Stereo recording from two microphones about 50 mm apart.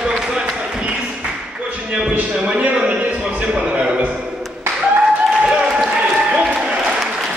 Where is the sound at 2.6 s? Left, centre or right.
Right.